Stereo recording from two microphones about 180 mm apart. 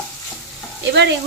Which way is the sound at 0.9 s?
75° right (ahead or behind).